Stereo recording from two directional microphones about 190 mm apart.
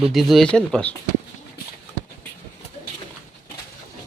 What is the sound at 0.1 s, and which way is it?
Speech, centre (ahead or behind).